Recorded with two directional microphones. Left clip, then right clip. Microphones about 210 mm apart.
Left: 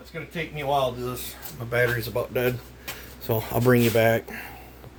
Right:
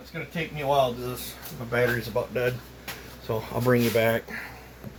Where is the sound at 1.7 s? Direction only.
55° left (ahead or behind); by 4.4 s 30° left (ahead or behind).